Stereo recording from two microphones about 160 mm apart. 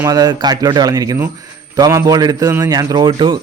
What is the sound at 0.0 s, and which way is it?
A man's voice, 25° right (ahead or behind).